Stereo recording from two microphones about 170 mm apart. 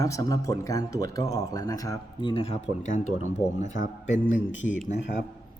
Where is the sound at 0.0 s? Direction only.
20° left (ahead or behind).